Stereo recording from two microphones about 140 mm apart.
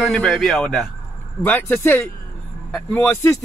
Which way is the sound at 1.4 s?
15° left (ahead or behind).